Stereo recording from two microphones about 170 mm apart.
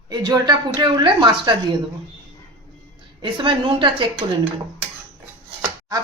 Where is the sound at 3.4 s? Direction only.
30° right (ahead or behind).